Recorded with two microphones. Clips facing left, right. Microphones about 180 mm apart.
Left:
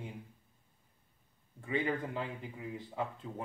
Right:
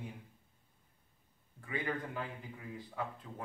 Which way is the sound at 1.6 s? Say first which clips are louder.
Left 4 dB; 25° left (ahead or behind).